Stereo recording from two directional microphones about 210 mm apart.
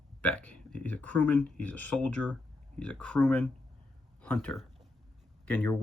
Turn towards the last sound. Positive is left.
turn(degrees=10)  # may be behind; listen again after turning